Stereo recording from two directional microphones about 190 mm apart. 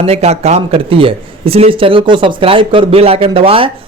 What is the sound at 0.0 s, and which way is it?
A man's voice, 35° right (ahead or behind).